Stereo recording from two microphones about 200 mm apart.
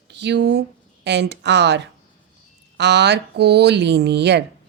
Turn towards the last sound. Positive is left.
turn(degrees=-60)  # may be behind; listen again after turning